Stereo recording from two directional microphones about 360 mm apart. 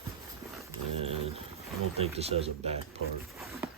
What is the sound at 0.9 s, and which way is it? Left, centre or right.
Pigeon, centre.